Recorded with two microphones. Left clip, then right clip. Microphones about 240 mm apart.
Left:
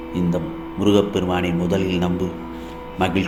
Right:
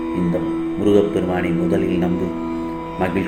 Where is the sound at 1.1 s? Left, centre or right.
Left.